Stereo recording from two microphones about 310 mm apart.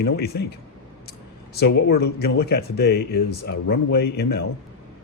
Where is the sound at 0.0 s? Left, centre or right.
Left.